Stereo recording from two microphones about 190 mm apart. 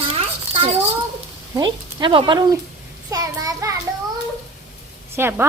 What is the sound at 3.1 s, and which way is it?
Child singing, 20° right (ahead or behind).